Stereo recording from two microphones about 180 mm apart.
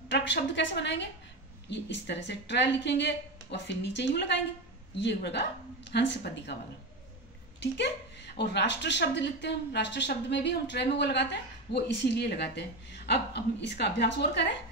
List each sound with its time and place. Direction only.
0.1 s a woman's voice: 75° left (ahead or behind)
7.6 s a woman's voice: 70° left (ahead or behind)